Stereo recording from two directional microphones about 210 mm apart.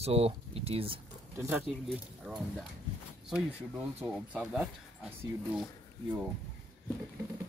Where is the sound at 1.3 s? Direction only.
10° right (ahead or behind).